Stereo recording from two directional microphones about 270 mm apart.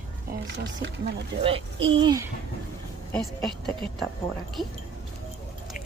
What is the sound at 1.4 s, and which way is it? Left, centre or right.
Speech, right.